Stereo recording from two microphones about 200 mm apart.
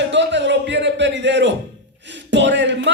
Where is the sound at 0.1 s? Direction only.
60° right (ahead or behind).